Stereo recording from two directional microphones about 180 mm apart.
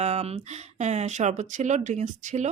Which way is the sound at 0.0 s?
35° right (ahead or behind).